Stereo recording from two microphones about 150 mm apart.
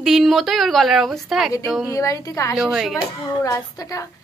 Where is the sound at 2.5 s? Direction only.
Centre (ahead or behind).